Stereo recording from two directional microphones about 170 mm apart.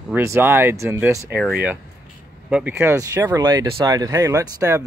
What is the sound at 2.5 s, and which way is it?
Speech, 10° right (ahead or behind).